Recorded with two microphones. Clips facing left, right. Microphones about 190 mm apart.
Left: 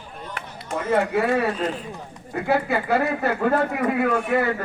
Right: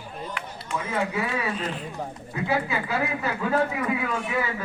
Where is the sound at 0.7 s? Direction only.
60° left (ahead or behind).